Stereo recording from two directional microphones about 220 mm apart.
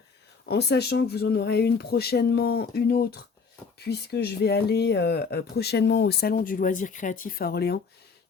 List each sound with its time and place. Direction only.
0.4 s speech: 45° left (ahead or behind)